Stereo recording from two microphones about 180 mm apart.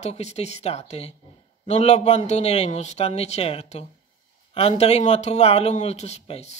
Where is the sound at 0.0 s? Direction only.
35° left (ahead or behind).